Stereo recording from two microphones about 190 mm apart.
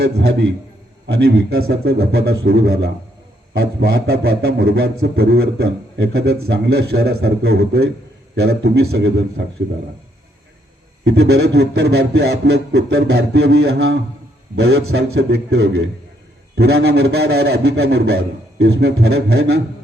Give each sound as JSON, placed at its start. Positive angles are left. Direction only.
{"t": 0.0, "sound": "a man's voice", "side_deg": -60}
{"t": 11.0, "sound": "a man's voice", "side_deg": -60}